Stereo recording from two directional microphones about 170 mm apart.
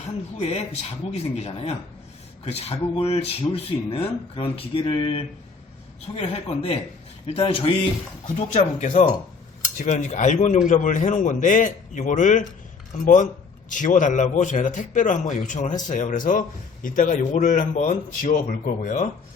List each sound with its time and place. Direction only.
0.0 s speech: 40° left (ahead or behind)